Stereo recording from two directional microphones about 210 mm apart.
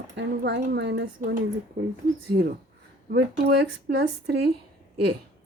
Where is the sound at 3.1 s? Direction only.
50° right (ahead or behind).